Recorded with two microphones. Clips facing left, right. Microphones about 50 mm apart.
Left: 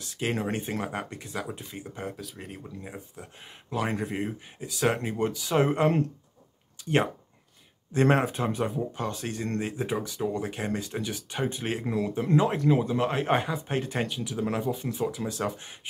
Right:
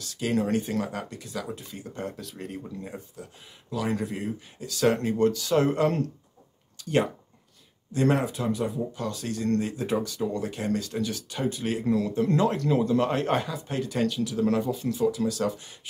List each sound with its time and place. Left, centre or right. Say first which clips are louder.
0.0 s speech: right 3 dB; left
2.0 s speech: right 3 dB; centre
3.7 s speech: even; left
4.6 s speech: right 3 dB; centre
13.4 s speech: left 1 dB; left